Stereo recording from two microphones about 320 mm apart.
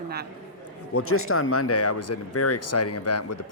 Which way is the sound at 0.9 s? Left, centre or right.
Left.